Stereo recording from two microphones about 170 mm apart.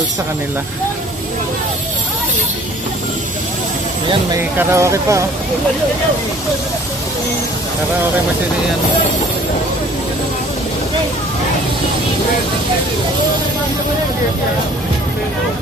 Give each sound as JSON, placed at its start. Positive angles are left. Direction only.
{"t": 4.5, "sound": "speech", "side_deg": -15}